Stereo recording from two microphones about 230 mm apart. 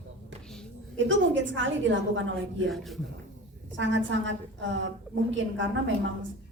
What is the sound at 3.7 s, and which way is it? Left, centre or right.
A woman's voice, right.